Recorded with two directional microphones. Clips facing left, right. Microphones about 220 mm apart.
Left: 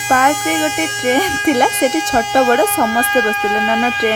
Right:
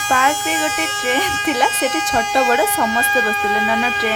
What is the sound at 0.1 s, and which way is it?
Speech, 50° left (ahead or behind).